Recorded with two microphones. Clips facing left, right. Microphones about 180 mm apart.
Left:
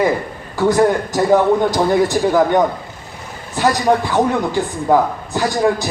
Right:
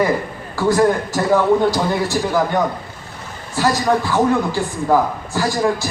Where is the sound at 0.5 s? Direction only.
20° left (ahead or behind).